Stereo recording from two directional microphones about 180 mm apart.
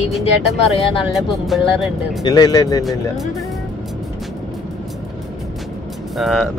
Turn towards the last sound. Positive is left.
turn(degrees=0)  # may be behind; listen again after turning